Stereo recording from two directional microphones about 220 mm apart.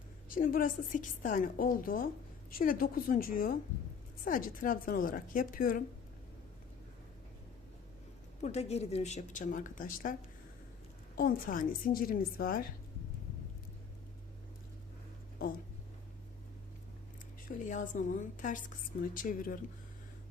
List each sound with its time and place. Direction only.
0.3 s speech: 40° left (ahead or behind)
8.4 s speech: 30° left (ahead or behind)
17.7 s speech: 35° left (ahead or behind)